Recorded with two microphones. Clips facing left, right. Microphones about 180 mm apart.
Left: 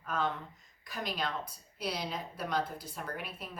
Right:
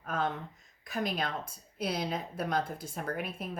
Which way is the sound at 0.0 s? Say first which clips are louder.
Right 1 dB; 50° right (ahead or behind).